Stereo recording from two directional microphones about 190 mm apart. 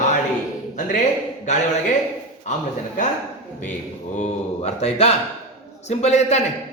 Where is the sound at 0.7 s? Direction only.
40° left (ahead or behind).